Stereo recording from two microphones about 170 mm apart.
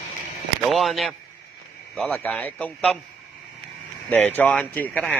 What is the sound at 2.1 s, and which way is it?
Speech, 10° left (ahead or behind).